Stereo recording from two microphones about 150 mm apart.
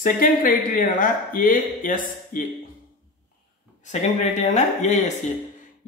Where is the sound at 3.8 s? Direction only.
50° left (ahead or behind).